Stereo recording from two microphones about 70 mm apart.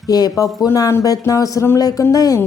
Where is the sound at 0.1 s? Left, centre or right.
Left.